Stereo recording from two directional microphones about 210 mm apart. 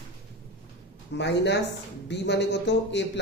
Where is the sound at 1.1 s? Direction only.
55° left (ahead or behind).